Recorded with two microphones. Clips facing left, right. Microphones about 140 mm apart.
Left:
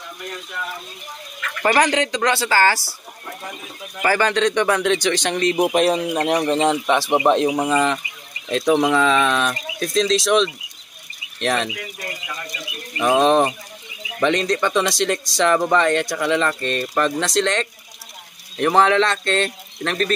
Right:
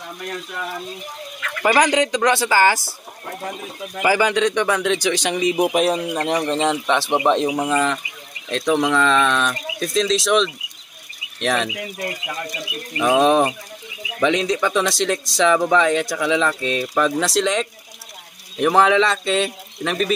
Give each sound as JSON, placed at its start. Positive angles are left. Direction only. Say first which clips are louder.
{"t": 1.6, "sound": "speech", "louder": "right 1 dB", "side_deg": -10}
{"t": 4.0, "sound": "speech", "louder": "right 1 dB", "side_deg": -10}
{"t": 6.0, "sound": "speech", "louder": "left 2 dB", "side_deg": 10}
{"t": 13.0, "sound": "speech", "louder": "even", "side_deg": 0}